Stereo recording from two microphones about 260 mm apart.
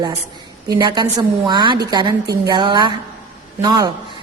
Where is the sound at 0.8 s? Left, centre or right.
Centre.